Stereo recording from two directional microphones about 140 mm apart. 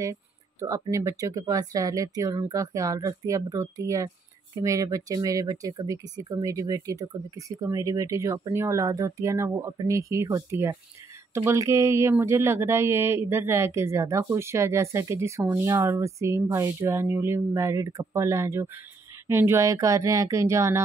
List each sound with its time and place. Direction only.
0.0 s speech: 25° right (ahead or behind)